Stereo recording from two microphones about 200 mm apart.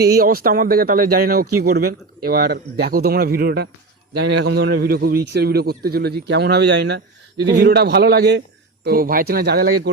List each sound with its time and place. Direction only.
0.0 s a man's voice: 50° right (ahead or behind)